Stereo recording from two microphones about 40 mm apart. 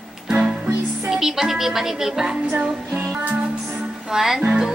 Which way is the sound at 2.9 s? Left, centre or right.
Right.